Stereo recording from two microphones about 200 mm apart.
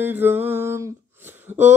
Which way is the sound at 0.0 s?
10° right (ahead or behind).